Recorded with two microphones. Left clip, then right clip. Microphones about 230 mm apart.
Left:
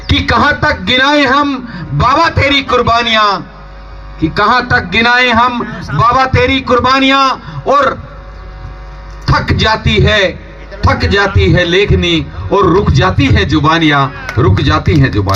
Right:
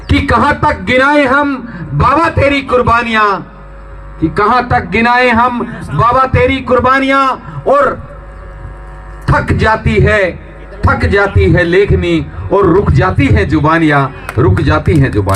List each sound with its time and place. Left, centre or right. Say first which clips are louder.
0.1 s a man's voice: even; left
9.2 s a man's voice: even; left